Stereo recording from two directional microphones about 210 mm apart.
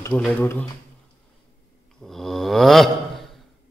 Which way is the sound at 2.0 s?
Centre (ahead or behind).